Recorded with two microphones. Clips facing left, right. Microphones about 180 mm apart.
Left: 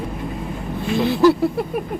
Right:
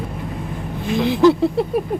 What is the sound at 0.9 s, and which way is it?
Speech, 15° right (ahead or behind).